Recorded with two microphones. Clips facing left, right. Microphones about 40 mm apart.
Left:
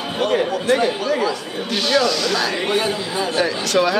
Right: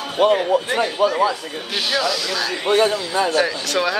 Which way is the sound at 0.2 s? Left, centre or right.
Centre.